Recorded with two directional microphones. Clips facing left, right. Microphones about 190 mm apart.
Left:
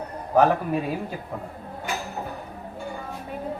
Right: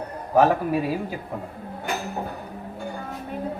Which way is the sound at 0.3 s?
5° right (ahead or behind).